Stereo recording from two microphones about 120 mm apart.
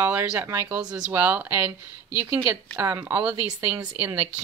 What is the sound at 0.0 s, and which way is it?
Speech, 15° right (ahead or behind).